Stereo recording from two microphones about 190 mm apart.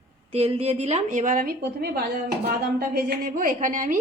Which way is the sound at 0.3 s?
30° right (ahead or behind).